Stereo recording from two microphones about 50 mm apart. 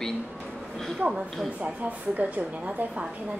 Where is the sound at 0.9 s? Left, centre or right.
Right.